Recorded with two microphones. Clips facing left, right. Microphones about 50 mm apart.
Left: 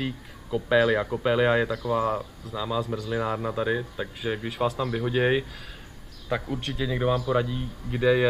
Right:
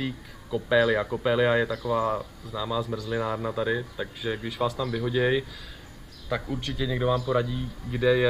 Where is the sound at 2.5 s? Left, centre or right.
Centre.